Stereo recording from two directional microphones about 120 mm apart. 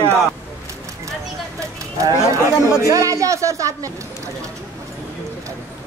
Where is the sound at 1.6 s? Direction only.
25° right (ahead or behind).